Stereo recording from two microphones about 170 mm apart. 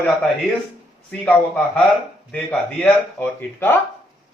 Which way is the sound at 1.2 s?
10° left (ahead or behind).